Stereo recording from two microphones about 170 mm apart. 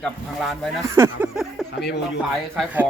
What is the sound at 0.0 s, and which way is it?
Speech, centre (ahead or behind).